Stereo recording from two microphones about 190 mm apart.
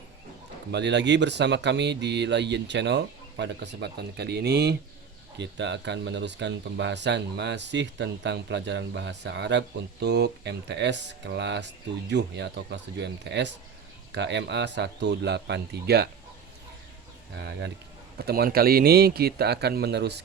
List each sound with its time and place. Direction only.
0.7 s speech: 65° right (ahead or behind)
17.3 s speech: 65° right (ahead or behind)